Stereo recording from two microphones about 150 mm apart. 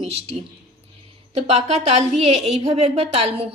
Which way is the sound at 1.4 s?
45° right (ahead or behind).